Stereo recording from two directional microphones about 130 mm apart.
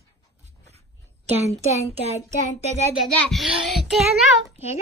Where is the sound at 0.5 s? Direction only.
55° right (ahead or behind).